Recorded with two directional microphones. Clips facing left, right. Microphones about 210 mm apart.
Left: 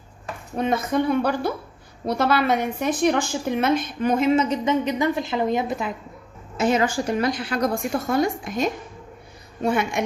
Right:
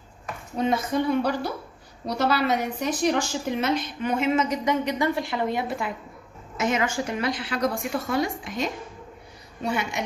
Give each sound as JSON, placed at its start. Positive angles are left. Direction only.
{"t": 0.9, "sound": "a woman's voice", "side_deg": 55}
{"t": 6.6, "sound": "a woman's voice", "side_deg": 35}